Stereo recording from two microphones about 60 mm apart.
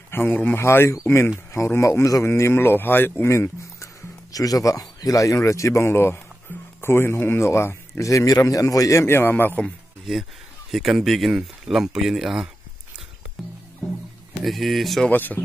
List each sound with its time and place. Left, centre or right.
0.1 s speech: left
0.6 s speech: left
1.5 s speech: left
2.2 s speech: left
3.3 s speech: left
4.3 s speech: left
8.1 s speech: left
9.0 s speech: left
10.7 s speech: centre
14.4 s speech: centre
15.0 s speech: left